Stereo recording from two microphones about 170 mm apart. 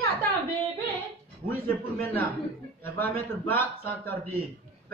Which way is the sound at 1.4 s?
10° left (ahead or behind).